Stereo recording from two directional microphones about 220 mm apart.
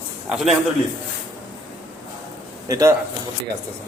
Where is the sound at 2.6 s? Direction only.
15° right (ahead or behind).